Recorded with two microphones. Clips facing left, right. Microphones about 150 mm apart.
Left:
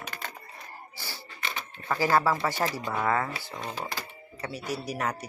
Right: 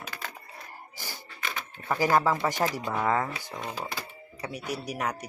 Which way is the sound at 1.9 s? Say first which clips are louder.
Even; 15° right (ahead or behind).